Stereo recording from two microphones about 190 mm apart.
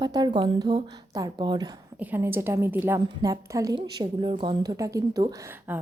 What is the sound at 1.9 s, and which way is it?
A woman's voice, 10° right (ahead or behind).